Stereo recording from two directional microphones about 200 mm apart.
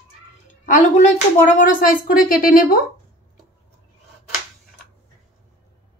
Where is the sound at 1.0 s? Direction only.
40° left (ahead or behind).